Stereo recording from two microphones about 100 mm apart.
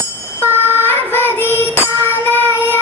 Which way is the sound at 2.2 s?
20° left (ahead or behind).